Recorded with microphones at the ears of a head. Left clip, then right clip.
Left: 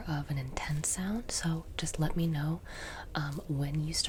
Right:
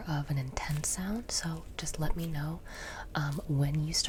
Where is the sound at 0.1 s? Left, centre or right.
Centre.